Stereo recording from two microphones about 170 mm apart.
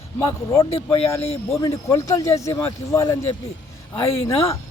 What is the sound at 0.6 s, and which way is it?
Speech, 35° left (ahead or behind).